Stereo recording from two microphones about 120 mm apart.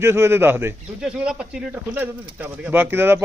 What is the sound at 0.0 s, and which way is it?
Speech, 20° right (ahead or behind).